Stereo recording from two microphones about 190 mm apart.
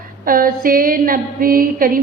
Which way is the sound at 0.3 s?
50° right (ahead or behind).